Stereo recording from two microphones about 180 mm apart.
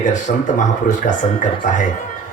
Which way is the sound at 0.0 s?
45° left (ahead or behind).